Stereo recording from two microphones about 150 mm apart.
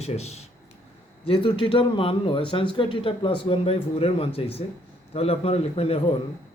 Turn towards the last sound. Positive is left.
turn(degrees=40)  # may be behind; listen again after turning